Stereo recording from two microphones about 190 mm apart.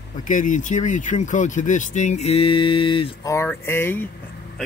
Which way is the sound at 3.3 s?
15° left (ahead or behind).